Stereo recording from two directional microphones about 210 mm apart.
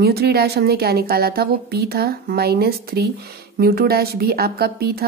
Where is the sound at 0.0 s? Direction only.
50° right (ahead or behind).